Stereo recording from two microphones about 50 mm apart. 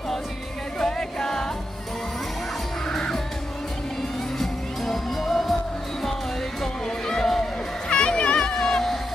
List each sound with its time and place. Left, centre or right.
0.7 s music: centre
2.9 s music: centre
4.4 s music: centre
6.6 s music: centre
7.9 s music: centre